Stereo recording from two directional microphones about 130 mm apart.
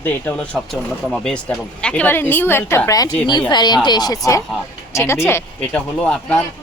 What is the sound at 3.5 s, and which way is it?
Speech, 35° left (ahead or behind).